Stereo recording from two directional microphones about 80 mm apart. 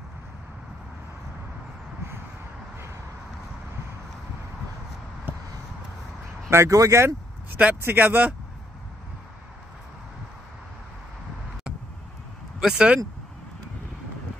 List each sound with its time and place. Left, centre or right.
6.5 s speech: right
7.5 s speech: right
12.5 s speech: centre